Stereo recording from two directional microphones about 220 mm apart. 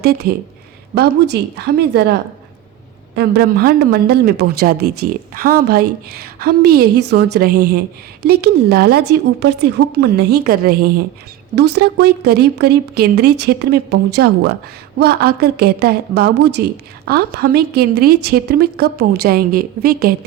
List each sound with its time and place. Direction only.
0.0 s speech: 45° right (ahead or behind)
3.2 s speech: 45° right (ahead or behind)